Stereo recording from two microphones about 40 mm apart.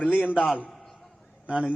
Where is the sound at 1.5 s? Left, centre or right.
Right.